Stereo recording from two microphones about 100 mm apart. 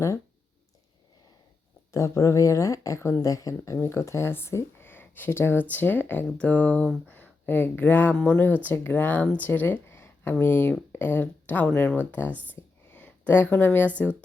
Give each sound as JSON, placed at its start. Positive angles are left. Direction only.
{"t": 1.9, "sound": "a woman's voice", "side_deg": 30}